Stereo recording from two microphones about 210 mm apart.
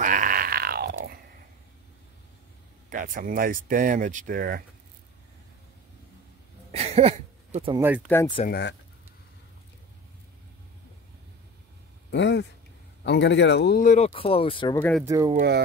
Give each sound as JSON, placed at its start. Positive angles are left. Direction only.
{"t": 0.0, "sound": "grunt", "side_deg": -40}
{"t": 2.9, "sound": "speech", "side_deg": -40}
{"t": 6.7, "sound": "a sound", "side_deg": -30}
{"t": 8.1, "sound": "speech", "side_deg": 10}
{"t": 8.5, "sound": "speech", "side_deg": 50}
{"t": 12.1, "sound": "speech", "side_deg": 55}
{"t": 14.8, "sound": "speech", "side_deg": 5}
{"t": 15.0, "sound": "speech", "side_deg": -15}